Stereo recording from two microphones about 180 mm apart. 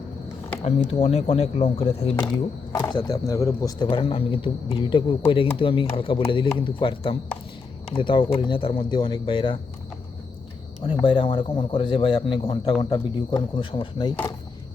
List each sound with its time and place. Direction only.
0.6 s speech: 35° left (ahead or behind)
11.0 s speech: 25° left (ahead or behind)